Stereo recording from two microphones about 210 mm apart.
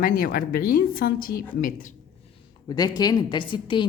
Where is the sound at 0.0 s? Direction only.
45° left (ahead or behind).